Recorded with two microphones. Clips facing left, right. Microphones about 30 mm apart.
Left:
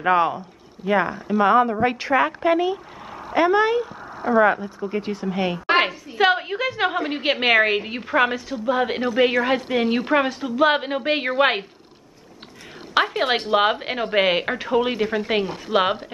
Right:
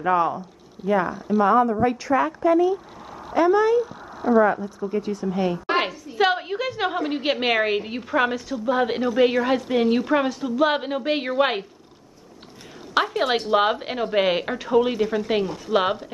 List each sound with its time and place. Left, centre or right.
0.0 s a woman's voice: left
3.3 s speech: left
3.8 s speech: left
4.8 s speech: left
5.8 s a sound: left
6.1 s a woman's voice: centre
8.6 s a woman's voice: centre
12.9 s a woman's voice: left
15.4 s speech: left
15.7 s a woman's voice: centre